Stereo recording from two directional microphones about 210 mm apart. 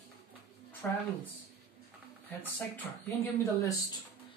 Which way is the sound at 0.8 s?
5° left (ahead or behind).